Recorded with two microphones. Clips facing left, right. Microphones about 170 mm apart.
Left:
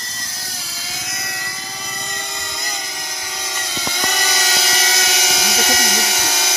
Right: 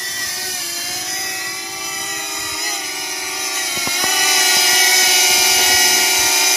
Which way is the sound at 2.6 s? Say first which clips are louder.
Right 1 dB; 10° right (ahead or behind).